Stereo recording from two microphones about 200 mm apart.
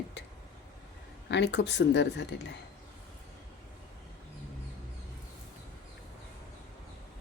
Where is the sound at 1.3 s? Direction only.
60° left (ahead or behind).